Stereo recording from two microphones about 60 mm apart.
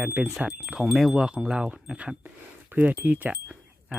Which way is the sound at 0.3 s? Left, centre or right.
Centre.